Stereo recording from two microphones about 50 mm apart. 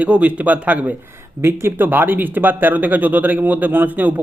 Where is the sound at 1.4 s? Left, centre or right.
Right.